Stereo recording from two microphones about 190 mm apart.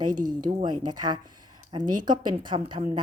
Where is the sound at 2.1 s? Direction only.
25° right (ahead or behind).